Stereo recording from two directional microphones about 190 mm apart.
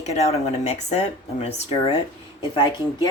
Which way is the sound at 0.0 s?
35° left (ahead or behind).